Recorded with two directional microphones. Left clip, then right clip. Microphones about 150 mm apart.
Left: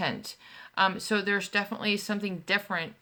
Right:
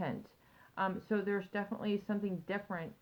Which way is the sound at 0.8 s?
20° left (ahead or behind).